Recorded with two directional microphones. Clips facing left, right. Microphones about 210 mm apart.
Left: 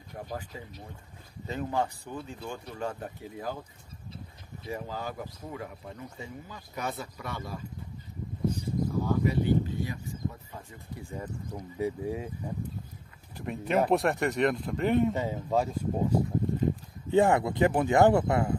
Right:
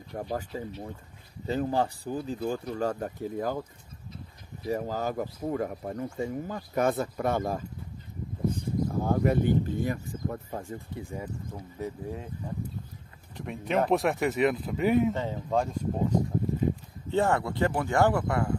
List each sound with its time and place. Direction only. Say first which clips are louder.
0.1 s speech: right 5 dB; 40° right (ahead or behind)
4.6 s speech: right 6 dB; 45° right (ahead or behind)
11.0 s speech: even; 15° right (ahead or behind)
11.8 s speech: left 4 dB; 10° left (ahead or behind)
13.3 s speech: left 1 dB; 5° left (ahead or behind)
15.1 s speech: even; 5° left (ahead or behind); by 18.5 s 20° left (ahead or behind)